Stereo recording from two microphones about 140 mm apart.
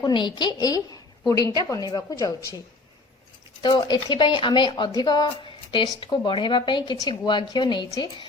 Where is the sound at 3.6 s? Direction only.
35° left (ahead or behind).